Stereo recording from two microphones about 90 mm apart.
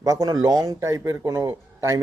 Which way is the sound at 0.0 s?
40° right (ahead or behind).